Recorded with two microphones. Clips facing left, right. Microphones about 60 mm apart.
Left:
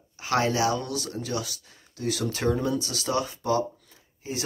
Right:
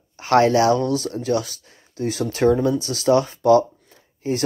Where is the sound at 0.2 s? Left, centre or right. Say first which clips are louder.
Right 9 dB; right.